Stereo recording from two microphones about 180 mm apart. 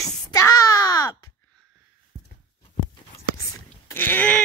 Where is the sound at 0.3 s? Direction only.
20° left (ahead or behind).